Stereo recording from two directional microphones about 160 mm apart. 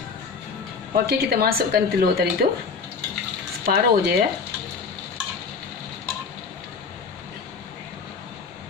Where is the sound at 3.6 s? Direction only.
80° right.